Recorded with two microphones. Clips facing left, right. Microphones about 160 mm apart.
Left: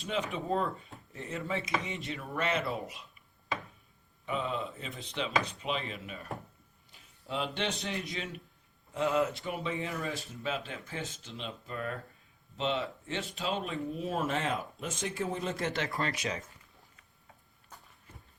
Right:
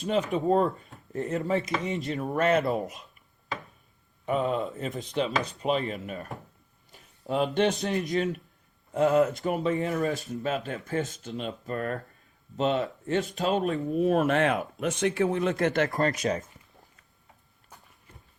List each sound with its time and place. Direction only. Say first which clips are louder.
0.0 s speech: right 8 dB; 40° right (ahead or behind)
4.3 s speech: right 7 dB; 45° right (ahead or behind)